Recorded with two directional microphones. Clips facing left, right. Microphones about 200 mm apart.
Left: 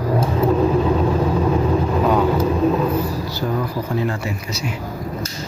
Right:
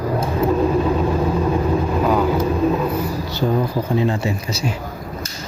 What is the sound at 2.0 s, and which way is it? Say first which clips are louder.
Vehicle: left 1 dB; centre (ahead or behind).